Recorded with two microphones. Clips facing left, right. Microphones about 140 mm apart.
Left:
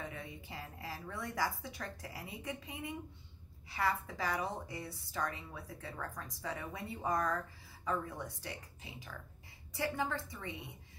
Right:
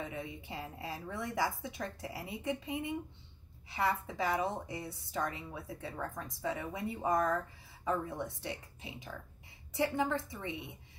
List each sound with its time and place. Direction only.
0.0 s a woman's voice: 20° right (ahead or behind)